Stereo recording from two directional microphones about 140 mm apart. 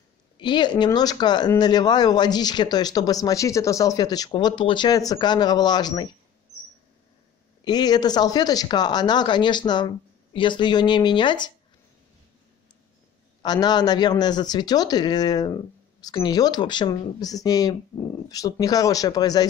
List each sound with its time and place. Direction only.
0.4 s speech: 35° left (ahead or behind)
7.6 s speech: 30° left (ahead or behind)
13.4 s speech: 30° left (ahead or behind)